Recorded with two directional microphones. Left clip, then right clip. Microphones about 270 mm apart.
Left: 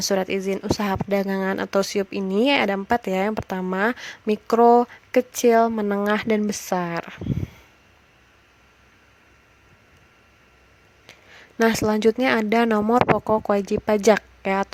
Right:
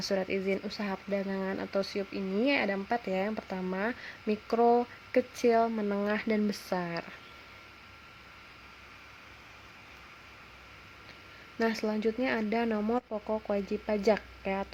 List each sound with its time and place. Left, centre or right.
0.0 s speech: left
11.6 s speech: left